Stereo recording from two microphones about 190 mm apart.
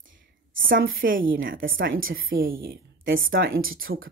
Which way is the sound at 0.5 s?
90° right.